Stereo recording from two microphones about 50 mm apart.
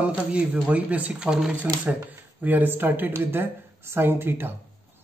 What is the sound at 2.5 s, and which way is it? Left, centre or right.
Speech, right.